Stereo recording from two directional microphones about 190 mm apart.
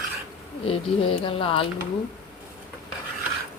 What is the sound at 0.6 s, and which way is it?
A woman's voice, 30° left (ahead or behind).